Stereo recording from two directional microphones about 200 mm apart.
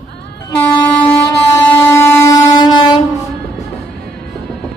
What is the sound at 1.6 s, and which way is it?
Train, 10° left (ahead or behind).